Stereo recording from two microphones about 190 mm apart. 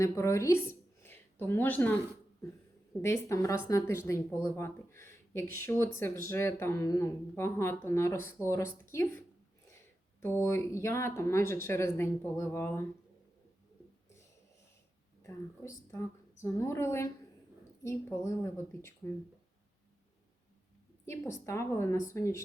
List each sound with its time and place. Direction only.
0.0 s speech: 15° left (ahead or behind)
1.0 s a sound: 10° left (ahead or behind)
3.0 s speech: 15° left (ahead or behind)
15.2 s a woman's voice: 15° left (ahead or behind)
21.0 s speech: 15° left (ahead or behind)